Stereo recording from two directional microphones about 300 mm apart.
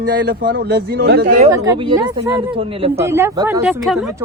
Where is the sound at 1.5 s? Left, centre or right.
Centre.